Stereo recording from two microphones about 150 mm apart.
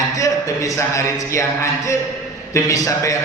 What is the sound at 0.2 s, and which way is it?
Speech, 20° left (ahead or behind).